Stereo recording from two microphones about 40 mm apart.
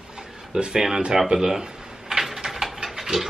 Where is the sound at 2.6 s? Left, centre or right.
Centre.